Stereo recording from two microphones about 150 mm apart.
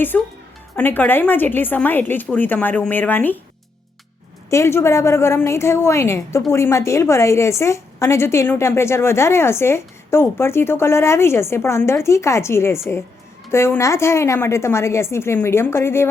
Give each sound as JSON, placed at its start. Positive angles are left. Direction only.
{"t": 0.1, "sound": "a woman's voice", "side_deg": 10}
{"t": 4.4, "sound": "a woman's voice", "side_deg": 20}